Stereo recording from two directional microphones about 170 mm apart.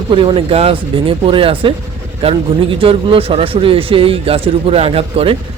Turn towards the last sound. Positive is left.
turn(degrees=-35)  # may be behind; listen again after turning